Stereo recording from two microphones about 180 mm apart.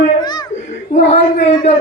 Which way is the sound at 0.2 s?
25° left (ahead or behind).